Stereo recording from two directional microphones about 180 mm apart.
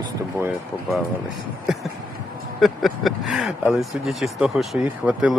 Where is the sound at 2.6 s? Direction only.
Centre (ahead or behind).